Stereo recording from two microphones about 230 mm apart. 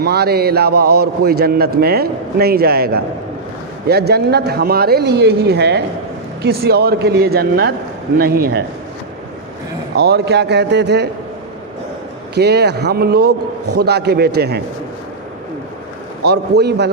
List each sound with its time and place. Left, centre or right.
0.0 s a man's voice: right
9.9 s speech: right
12.3 s speech: right
16.2 s speech: right